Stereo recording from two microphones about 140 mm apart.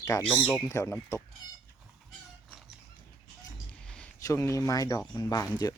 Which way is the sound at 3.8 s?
5° left (ahead or behind).